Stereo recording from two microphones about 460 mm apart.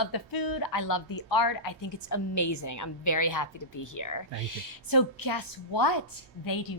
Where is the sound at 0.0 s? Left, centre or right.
Left.